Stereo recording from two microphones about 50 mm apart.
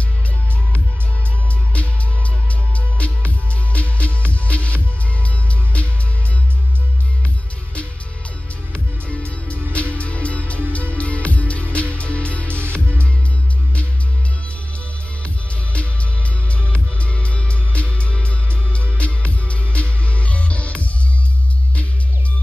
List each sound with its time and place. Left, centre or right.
1.7 s music: left
8.7 s music: left
15.2 s music: left